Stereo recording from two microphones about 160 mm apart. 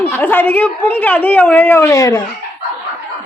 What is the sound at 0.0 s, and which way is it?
Speech, 10° left (ahead or behind).